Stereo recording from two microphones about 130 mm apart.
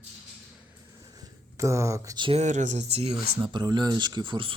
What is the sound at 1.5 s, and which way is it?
Speech, 25° right (ahead or behind).